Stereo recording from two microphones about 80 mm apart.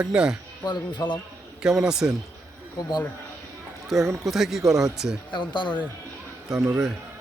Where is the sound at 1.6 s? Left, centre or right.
Centre.